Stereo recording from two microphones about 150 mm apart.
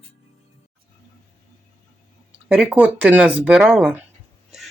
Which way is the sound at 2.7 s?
10° right (ahead or behind).